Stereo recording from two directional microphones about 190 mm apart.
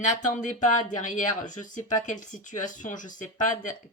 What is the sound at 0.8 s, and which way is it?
Speech, 40° left (ahead or behind).